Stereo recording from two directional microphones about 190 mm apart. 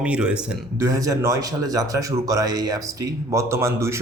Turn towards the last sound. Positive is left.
turn(degrees=-15)  # may be behind; listen again after turning